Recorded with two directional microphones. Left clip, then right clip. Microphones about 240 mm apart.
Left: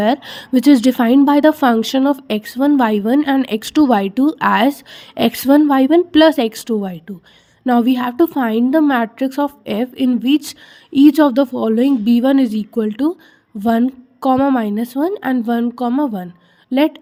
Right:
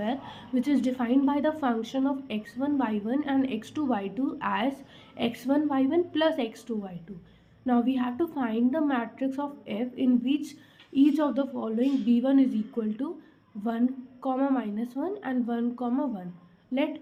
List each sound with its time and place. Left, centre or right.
0.0 s a woman's voice: left